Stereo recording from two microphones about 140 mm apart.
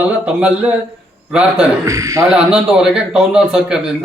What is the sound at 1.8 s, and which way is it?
Speech, 25° right (ahead or behind).